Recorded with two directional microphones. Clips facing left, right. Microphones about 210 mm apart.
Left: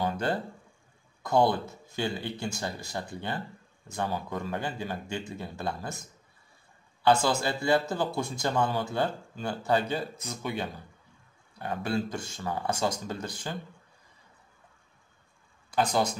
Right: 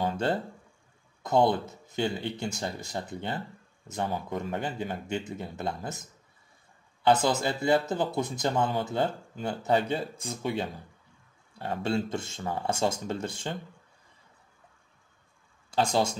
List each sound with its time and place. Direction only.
0.0 s a sound: 25° right (ahead or behind)
1.2 s speech: 20° right (ahead or behind)
15.7 s speech: 25° right (ahead or behind)